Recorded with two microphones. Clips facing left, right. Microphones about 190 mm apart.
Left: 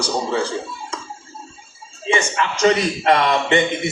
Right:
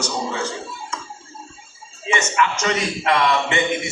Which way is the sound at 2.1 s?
30° left (ahead or behind).